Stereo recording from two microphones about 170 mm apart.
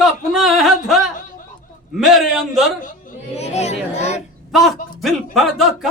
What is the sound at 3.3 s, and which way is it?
Speech, 40° left (ahead or behind).